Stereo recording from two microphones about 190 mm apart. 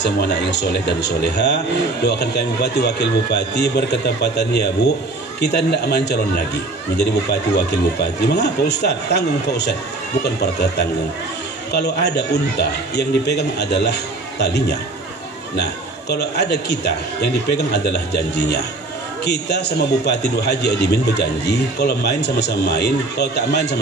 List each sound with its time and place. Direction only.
0.0 s a man's voice: 60° left (ahead or behind)
8.3 s a man's voice: 60° left (ahead or behind)